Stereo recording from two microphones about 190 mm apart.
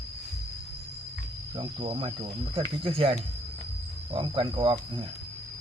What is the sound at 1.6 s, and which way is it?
Speech, 30° right (ahead or behind).